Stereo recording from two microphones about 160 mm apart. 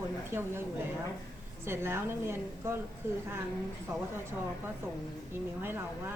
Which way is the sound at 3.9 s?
20° right (ahead or behind).